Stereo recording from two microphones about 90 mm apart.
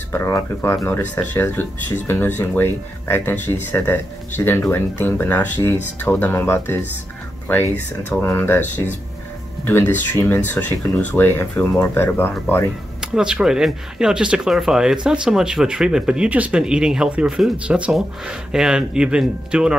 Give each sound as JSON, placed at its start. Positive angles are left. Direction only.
{"t": 0.1, "sound": "speech", "side_deg": 30}
{"t": 8.0, "sound": "speech", "side_deg": 25}
{"t": 13.0, "sound": "speech", "side_deg": -10}